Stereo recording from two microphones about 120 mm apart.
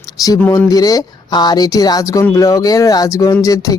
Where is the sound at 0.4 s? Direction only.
30° left (ahead or behind).